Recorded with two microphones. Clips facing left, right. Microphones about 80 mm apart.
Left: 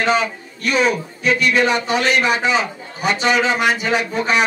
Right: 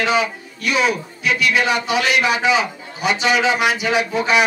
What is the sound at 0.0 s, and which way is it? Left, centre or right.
Speech, left.